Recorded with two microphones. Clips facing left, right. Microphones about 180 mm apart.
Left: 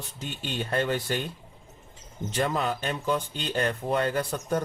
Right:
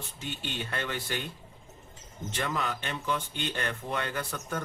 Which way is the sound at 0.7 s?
35° left (ahead or behind).